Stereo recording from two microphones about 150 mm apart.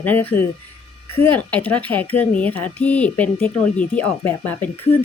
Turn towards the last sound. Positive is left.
turn(degrees=15)  # may be behind; listen again after turning